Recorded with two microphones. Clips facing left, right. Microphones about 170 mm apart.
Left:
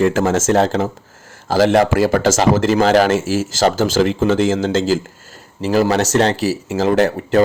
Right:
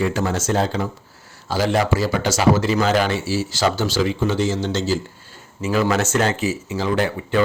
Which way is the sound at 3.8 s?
90° left.